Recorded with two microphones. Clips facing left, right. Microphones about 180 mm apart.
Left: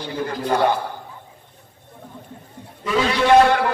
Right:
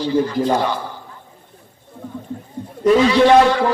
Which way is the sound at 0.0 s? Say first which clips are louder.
Right 8 dB; 55° left (ahead or behind).